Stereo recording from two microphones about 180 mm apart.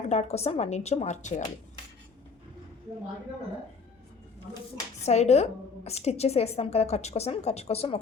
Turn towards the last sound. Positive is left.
turn(degrees=35)  # may be behind; listen again after turning